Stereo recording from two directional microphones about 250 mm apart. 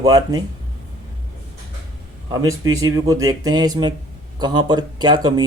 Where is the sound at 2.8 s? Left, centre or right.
Centre.